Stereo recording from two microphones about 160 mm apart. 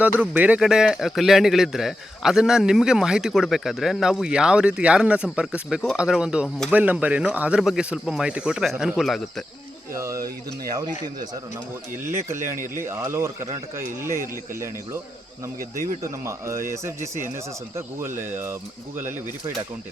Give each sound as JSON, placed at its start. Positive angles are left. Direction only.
{"t": 0.2, "sound": "speech", "side_deg": -10}
{"t": 9.9, "sound": "speech", "side_deg": -20}
{"t": 16.2, "sound": "speech", "side_deg": -15}
{"t": 18.2, "sound": "speech", "side_deg": -15}